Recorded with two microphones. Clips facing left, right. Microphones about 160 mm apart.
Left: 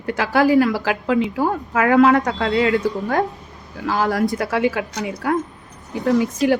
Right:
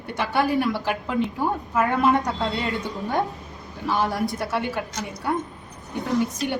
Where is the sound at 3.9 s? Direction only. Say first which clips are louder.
Left 5 dB; 90° left.